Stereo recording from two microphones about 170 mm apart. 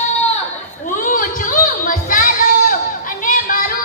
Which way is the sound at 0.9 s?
50° left (ahead or behind).